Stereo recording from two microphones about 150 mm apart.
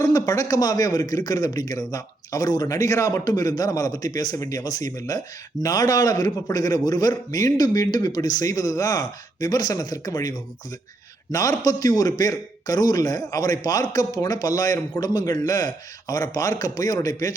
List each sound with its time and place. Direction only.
0.0 s a man's voice: 25° left (ahead or behind)